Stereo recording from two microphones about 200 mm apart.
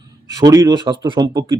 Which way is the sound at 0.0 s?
20° right (ahead or behind).